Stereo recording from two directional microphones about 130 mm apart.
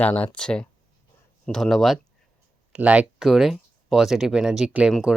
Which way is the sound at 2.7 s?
10° right (ahead or behind).